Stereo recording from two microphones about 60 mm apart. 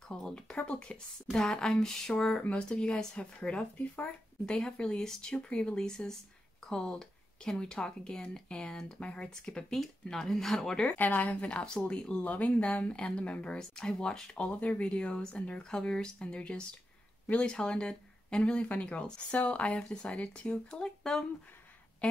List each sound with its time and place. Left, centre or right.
0.1 s speech: centre
4.6 s speech: centre
10.9 s speech: left
13.6 s speech: centre
14.3 s speech: left
20.7 s speech: centre